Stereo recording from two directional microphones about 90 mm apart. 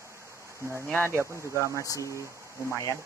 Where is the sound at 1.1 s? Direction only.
30° right (ahead or behind).